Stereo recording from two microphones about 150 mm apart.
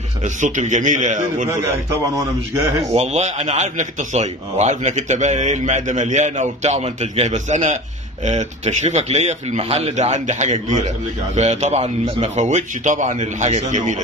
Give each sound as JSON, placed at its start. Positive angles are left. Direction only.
{"t": 0.4, "sound": "a man's voice", "side_deg": -55}
{"t": 2.1, "sound": "a man's voice", "side_deg": -20}
{"t": 3.0, "sound": "a man's voice", "side_deg": -50}